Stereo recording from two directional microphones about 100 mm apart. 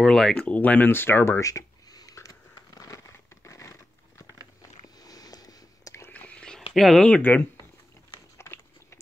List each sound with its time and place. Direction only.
0.0 s speech: 5° left (ahead or behind); by 1.4 s 20° left (ahead or behind)
1.4 s a sound: 35° left (ahead or behind)
3.1 s crumpling: 30° left (ahead or behind)
4.8 s a sound: 40° left (ahead or behind)
6.0 s whispering: 15° left (ahead or behind)
6.7 s speech: centre (ahead or behind)
7.2 s speech: 20° left (ahead or behind)
8.1 s biting: 25° left (ahead or behind)